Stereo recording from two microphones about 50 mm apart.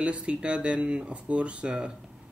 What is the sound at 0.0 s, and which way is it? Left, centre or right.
Speech, right.